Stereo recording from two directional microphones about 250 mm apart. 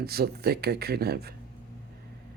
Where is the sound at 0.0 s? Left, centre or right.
Right.